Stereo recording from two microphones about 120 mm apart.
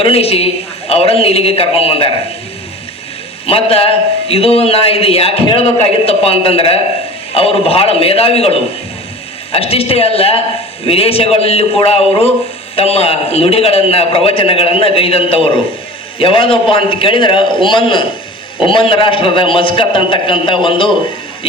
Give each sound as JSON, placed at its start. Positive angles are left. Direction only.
{"t": 0.0, "sound": "a man's voice", "side_deg": 55}
{"t": 3.4, "sound": "a man's voice", "side_deg": 55}